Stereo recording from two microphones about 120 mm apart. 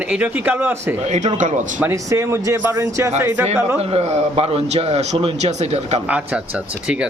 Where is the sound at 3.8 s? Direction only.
60° right (ahead or behind).